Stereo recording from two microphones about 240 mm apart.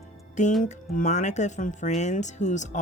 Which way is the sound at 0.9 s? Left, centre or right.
Left.